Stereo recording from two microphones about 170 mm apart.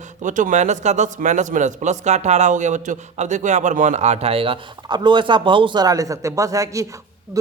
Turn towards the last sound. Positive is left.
turn(degrees=-20)  # may be behind; listen again after turning